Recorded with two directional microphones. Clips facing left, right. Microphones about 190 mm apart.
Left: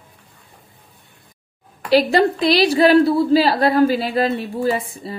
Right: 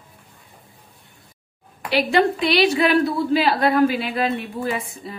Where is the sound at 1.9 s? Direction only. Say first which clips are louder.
Left 4 dB; 35° left (ahead or behind).